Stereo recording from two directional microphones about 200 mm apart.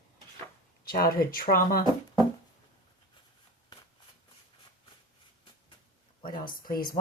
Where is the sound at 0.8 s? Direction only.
50° left (ahead or behind).